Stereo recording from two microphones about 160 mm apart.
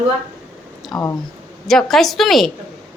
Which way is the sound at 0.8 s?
Centre (ahead or behind).